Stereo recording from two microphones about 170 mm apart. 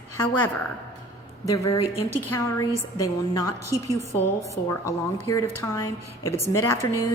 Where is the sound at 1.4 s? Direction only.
20° left (ahead or behind).